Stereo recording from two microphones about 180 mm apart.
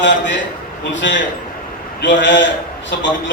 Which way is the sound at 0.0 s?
85° left.